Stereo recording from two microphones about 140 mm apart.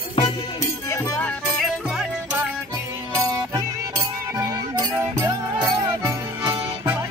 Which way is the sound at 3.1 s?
25° right (ahead or behind).